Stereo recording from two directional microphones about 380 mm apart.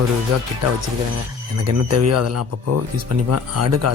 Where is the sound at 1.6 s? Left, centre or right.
Right.